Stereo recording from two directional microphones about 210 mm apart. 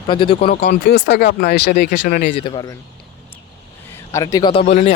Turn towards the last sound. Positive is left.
turn(degrees=30)  # may be behind; listen again after turning